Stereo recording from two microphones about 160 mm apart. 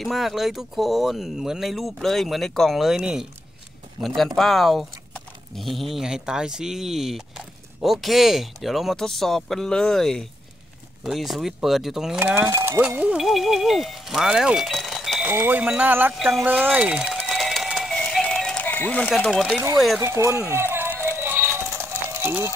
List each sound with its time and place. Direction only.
0.0 s speech: centre (ahead or behind)
15.2 s wind chime: 10° right (ahead or behind)
16.2 s speech: centre (ahead or behind)
16.7 s music: 5° right (ahead or behind)
20.0 s wind chime: 15° right (ahead or behind)
21.0 s music: 15° right (ahead or behind)